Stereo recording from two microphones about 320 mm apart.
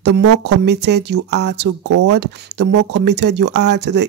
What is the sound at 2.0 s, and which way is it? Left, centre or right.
Speech, right.